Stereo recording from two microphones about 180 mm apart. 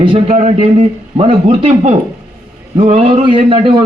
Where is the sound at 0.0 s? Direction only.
35° right (ahead or behind).